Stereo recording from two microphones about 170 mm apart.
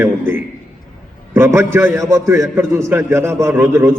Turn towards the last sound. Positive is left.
turn(degrees=-15)  # may be behind; listen again after turning